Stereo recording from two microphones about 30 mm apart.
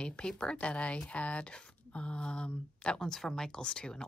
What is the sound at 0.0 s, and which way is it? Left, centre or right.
Speech, left.